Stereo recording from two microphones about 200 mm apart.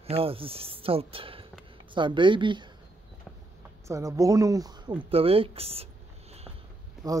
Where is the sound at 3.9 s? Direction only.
15° right (ahead or behind).